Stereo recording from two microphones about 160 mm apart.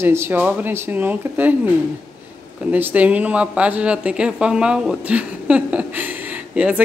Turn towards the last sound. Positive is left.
turn(degrees=-10)  # may be behind; listen again after turning